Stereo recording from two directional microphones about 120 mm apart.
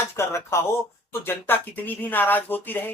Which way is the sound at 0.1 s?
20° left (ahead or behind).